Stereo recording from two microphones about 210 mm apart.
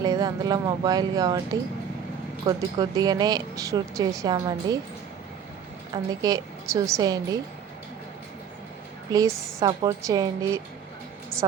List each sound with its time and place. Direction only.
0.0 s speech: 20° right (ahead or behind)
2.5 s speech: 20° right (ahead or behind)
5.9 s speech: 15° right (ahead or behind)
9.1 s speech: 15° right (ahead or behind)